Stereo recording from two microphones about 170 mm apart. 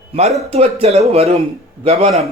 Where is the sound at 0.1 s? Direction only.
40° right (ahead or behind).